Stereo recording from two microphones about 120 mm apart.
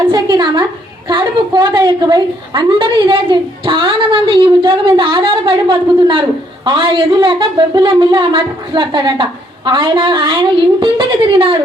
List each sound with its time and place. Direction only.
0.1 s a woman's voice: 40° right (ahead or behind)